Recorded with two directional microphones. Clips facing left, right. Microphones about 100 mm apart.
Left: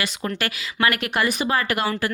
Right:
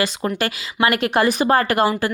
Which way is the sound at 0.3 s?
30° right (ahead or behind).